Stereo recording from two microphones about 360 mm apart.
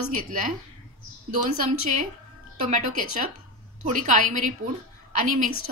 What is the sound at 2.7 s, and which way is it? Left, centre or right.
A woman's voice, right.